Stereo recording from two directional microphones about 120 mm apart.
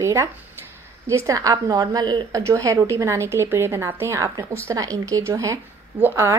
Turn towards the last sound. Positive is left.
turn(degrees=-20)  # may be behind; listen again after turning